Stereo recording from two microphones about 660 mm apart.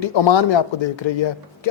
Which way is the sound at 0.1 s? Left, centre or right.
Left.